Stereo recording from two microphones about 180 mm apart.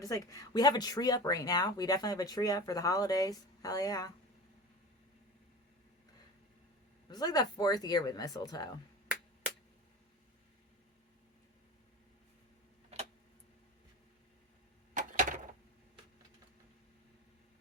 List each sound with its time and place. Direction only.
0.0 s speech: 20° left (ahead or behind)
7.1 s speech: 20° left (ahead or behind)
14.9 s a sound: 45° right (ahead or behind)